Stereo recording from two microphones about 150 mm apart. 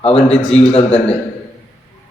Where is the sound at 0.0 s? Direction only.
40° left (ahead or behind).